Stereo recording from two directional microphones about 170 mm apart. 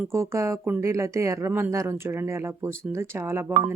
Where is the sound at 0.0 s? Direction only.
15° right (ahead or behind).